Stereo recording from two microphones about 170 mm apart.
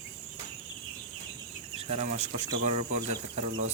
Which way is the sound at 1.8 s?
35° right (ahead or behind).